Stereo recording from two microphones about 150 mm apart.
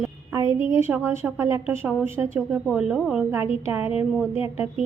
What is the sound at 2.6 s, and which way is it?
A woman's voice, 5° right (ahead or behind).